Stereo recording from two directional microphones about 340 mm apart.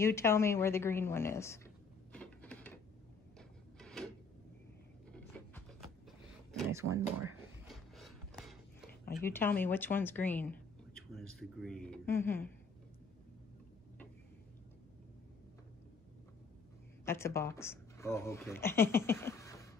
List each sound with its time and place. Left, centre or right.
0.0 s speech: centre
2.1 s printer: centre
6.7 s a sound: centre
8.8 s a sound: left
9.2 s speech: centre
17.0 s speech: centre